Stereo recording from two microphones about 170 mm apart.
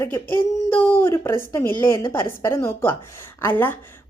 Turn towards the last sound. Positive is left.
turn(degrees=10)  # may be behind; listen again after turning